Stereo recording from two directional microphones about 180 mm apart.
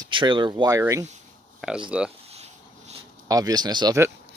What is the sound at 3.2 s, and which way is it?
Speech, 20° right (ahead or behind).